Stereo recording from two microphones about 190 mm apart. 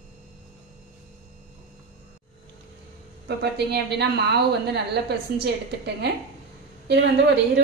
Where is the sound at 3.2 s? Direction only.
60° right (ahead or behind).